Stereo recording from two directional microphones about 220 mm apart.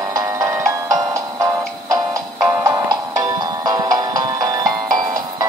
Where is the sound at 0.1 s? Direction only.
15° right (ahead or behind).